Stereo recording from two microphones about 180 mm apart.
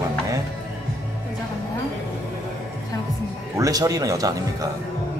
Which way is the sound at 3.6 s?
20° right (ahead or behind).